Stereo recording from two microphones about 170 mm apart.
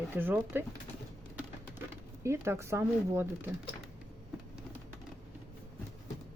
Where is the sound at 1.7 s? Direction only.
15° right (ahead or behind).